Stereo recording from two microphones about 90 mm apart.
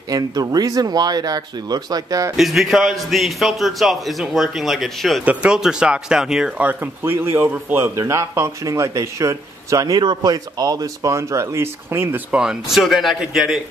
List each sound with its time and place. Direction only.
0.1 s speech: 45° right (ahead or behind)
2.3 s a man's voice: 5° right (ahead or behind)
5.2 s speech: 15° right (ahead or behind)
6.6 s speech: 20° right (ahead or behind); by 9.9 s 40° right (ahead or behind)
9.9 s speech: 55° right (ahead or behind); by 12.2 s 25° right (ahead or behind)
12.3 s a man's voice: 10° right (ahead or behind)